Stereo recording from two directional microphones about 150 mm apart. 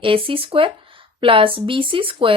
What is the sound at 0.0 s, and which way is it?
Speech, 35° right (ahead or behind).